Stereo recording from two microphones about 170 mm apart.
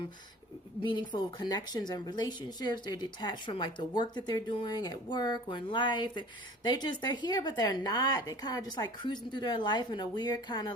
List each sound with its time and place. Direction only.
0.8 s a woman's voice: 30° left (ahead or behind)